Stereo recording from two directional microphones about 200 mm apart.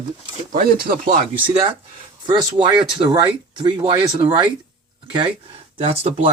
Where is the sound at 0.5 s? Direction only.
45° right (ahead or behind).